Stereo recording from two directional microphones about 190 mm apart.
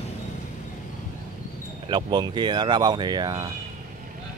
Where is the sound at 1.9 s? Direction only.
25° right (ahead or behind).